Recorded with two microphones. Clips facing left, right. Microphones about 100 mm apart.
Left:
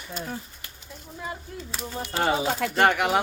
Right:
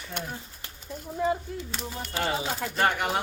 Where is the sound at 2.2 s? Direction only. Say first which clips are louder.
Left 6 dB; 85° left.